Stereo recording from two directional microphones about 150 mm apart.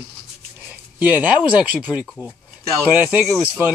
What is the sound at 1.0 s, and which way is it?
Speech, 10° right (ahead or behind).